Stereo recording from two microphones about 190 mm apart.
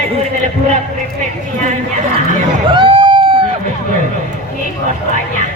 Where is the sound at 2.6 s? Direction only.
25° right (ahead or behind).